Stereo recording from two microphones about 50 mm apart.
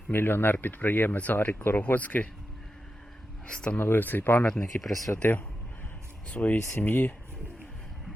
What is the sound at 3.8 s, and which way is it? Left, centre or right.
Speech, left.